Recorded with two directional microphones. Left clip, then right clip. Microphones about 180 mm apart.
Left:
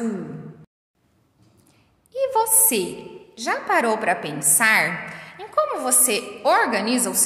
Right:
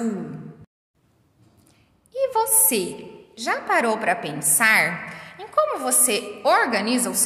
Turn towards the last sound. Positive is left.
turn(degrees=0)  # may be behind; listen again after turning